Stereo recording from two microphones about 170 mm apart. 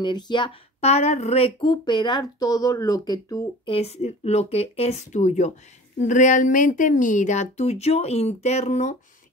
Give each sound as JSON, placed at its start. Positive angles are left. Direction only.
{"t": 0.0, "sound": "speech", "side_deg": 25}
{"t": 0.7, "sound": "speech", "side_deg": 40}
{"t": 3.6, "sound": "a woman's voice", "side_deg": 35}